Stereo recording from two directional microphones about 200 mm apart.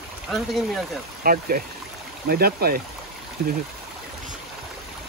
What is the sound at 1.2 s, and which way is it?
Speech, 45° right (ahead or behind).